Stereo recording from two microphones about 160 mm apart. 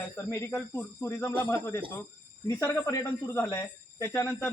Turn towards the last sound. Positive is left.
turn(degrees=15)  # may be behind; listen again after turning